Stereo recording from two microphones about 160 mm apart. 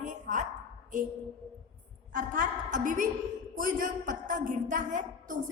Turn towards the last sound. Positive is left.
turn(degrees=-55)  # may be behind; listen again after turning